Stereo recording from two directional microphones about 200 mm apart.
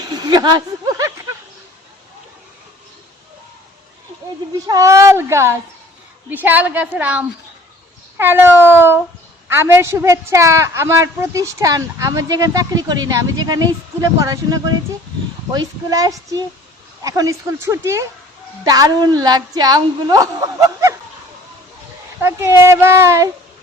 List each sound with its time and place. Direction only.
0.1 s a sound: 20° right (ahead or behind)
4.6 s a woman's voice: 15° right (ahead or behind)
22.2 s a woman's voice: 15° right (ahead or behind)